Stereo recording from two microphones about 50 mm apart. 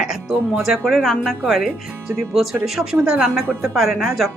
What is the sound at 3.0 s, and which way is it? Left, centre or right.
Speech, centre.